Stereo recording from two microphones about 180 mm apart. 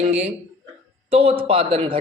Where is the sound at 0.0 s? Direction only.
35° right (ahead or behind).